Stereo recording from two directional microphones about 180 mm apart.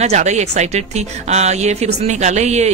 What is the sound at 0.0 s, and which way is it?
Speech, 40° right (ahead or behind).